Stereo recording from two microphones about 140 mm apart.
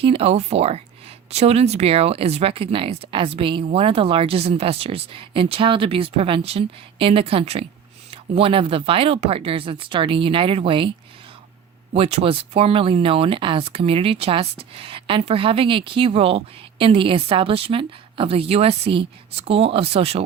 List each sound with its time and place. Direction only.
0.0 s speech: 45° right (ahead or behind)
11.9 s speech: 45° right (ahead or behind)